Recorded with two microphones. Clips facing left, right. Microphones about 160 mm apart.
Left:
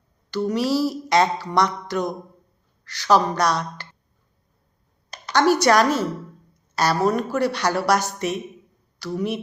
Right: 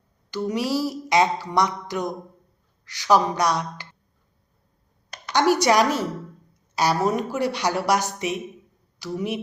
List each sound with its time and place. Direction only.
0.3 s a woman's voice: 15° right (ahead or behind)
5.3 s a woman's voice: 15° right (ahead or behind)